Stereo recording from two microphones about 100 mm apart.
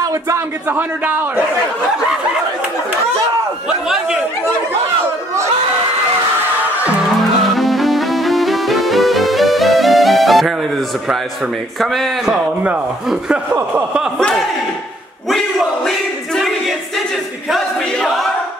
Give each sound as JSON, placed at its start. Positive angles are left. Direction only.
{"t": 0.0, "sound": "speech", "side_deg": -35}
{"t": 0.7, "sound": "a man's voice", "side_deg": -20}
{"t": 3.6, "sound": "a man's voice", "side_deg": -5}
{"t": 7.5, "sound": "music", "side_deg": 0}
{"t": 11.8, "sound": "a man's voice", "side_deg": 0}
{"t": 13.5, "sound": "a man's voice", "side_deg": -20}
{"t": 14.1, "sound": "a sound", "side_deg": 5}
{"t": 16.3, "sound": "music", "side_deg": 0}
{"t": 17.5, "sound": "choir", "side_deg": 5}